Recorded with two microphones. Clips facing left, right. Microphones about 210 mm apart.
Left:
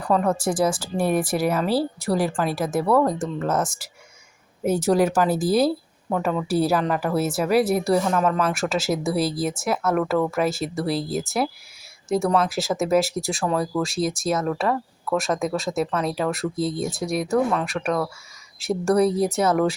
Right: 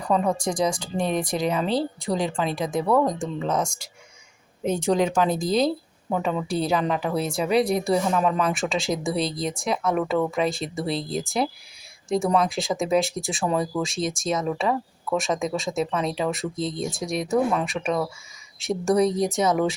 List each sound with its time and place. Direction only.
0.1 s a woman's voice: 5° left (ahead or behind)